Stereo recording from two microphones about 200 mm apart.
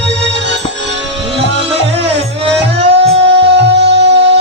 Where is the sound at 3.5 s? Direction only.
60° right (ahead or behind).